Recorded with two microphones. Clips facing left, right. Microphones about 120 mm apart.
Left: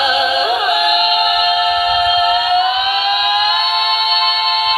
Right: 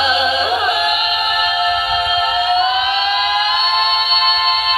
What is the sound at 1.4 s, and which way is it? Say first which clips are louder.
A capella: left 3 dB; 30° right (ahead or behind).